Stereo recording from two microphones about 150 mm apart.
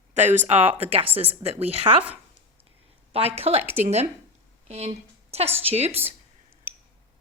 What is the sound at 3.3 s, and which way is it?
A woman's voice, 45° right (ahead or behind).